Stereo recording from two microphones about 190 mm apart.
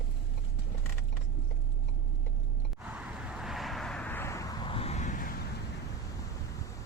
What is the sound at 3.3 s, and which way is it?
Vehicle, centre (ahead or behind).